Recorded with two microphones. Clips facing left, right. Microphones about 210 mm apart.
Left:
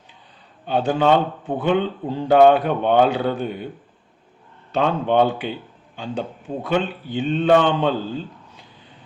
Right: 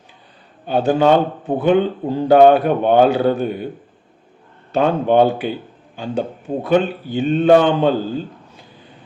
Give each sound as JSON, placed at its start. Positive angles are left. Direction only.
{"t": 0.9, "sound": "a man's voice", "side_deg": -40}
{"t": 4.7, "sound": "a man's voice", "side_deg": -45}